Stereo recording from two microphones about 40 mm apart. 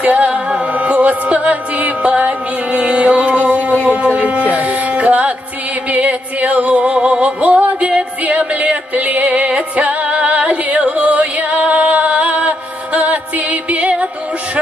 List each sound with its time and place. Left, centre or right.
0.0 s singing: right
0.3 s music: right
3.9 s speech: right
4.6 s music: right